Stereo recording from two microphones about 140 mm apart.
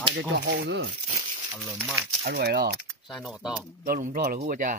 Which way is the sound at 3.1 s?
Centre (ahead or behind).